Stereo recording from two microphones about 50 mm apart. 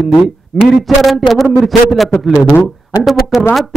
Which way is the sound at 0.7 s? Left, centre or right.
Centre.